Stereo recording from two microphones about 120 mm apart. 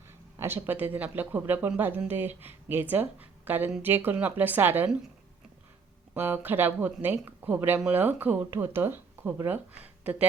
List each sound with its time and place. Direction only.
0.3 s speech: 20° right (ahead or behind)
6.1 s speech: 15° right (ahead or behind)